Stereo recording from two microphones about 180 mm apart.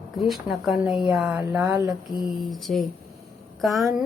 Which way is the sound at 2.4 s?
Centre (ahead or behind).